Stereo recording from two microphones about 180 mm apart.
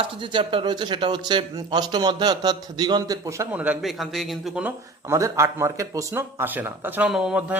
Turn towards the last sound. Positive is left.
turn(degrees=-5)  # may be behind; listen again after turning